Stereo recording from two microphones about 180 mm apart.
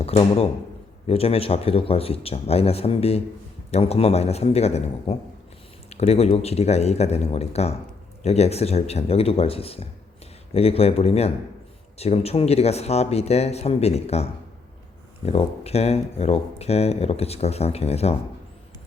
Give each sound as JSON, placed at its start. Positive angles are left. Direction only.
{"t": 0.0, "sound": "speech", "side_deg": 35}